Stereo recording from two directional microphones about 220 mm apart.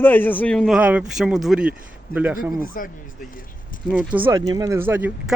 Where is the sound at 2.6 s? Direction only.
40° left (ahead or behind).